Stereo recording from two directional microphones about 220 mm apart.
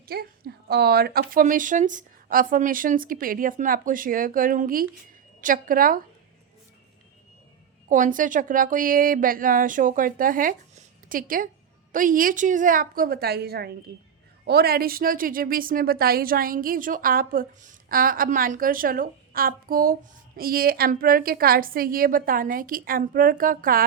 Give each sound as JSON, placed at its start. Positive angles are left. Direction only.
{"t": 0.1, "sound": "a woman's voice", "side_deg": -45}
{"t": 7.9, "sound": "a woman's voice", "side_deg": -35}